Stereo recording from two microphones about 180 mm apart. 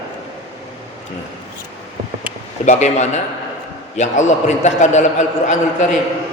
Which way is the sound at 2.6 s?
40° left (ahead or behind).